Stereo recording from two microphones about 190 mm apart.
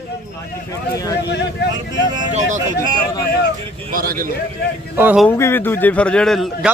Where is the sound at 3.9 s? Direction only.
50° right (ahead or behind).